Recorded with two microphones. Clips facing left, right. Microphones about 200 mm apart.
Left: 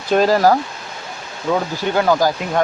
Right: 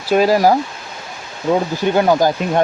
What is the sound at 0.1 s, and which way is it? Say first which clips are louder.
Speech: right 1 dB; 10° right (ahead or behind).